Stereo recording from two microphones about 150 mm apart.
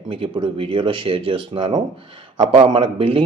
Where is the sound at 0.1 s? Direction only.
40° right (ahead or behind).